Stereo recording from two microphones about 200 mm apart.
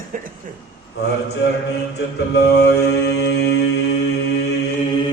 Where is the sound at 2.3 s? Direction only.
55° left (ahead or behind).